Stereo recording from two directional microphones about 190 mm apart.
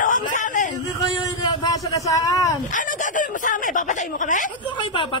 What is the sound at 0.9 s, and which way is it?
A man's voice, 25° left (ahead or behind).